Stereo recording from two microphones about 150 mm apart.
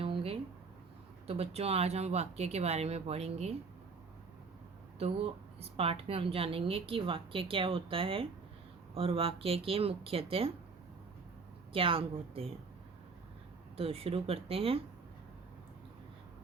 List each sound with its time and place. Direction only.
0.0 s a sound: 40° right (ahead or behind)
1.3 s speech: 40° right (ahead or behind)
4.9 s a woman's voice: 45° right (ahead or behind)
11.7 s a woman's voice: 35° right (ahead or behind)
13.7 s a woman's voice: 40° right (ahead or behind)